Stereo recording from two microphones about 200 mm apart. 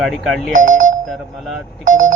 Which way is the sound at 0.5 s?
40° right (ahead or behind).